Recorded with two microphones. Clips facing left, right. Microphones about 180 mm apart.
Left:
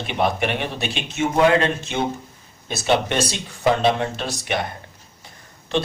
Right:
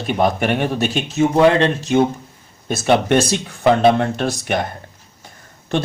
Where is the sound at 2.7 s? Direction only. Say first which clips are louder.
Right 5 dB; 50° right (ahead or behind).